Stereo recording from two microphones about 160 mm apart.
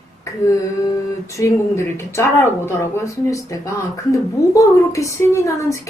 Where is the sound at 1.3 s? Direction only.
20° left (ahead or behind).